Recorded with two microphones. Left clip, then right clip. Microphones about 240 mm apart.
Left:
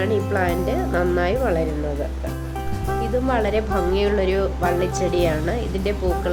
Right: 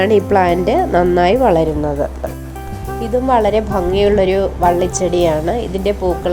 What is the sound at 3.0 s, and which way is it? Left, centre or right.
A woman's voice, centre.